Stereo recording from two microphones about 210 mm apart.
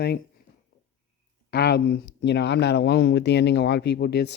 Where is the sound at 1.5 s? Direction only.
50° left (ahead or behind).